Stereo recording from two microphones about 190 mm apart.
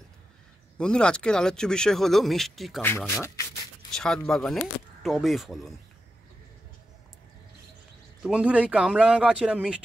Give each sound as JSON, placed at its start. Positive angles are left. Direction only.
{"t": 0.7, "sound": "speech", "side_deg": 5}
{"t": 3.1, "sound": "speech", "side_deg": 15}
{"t": 3.9, "sound": "speech", "side_deg": 5}
{"t": 8.2, "sound": "speech", "side_deg": -5}